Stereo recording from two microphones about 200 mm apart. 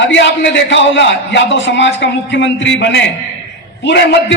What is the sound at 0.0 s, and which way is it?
A man's voice, 65° left (ahead or behind).